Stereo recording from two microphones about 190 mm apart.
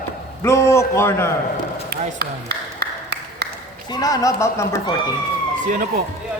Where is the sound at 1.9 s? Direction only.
60° right (ahead or behind).